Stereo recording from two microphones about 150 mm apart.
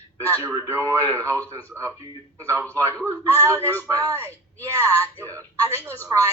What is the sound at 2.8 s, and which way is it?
Speech, 10° left (ahead or behind).